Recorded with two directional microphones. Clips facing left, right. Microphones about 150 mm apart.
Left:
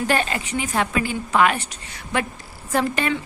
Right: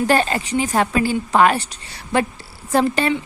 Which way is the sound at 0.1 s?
35° right (ahead or behind).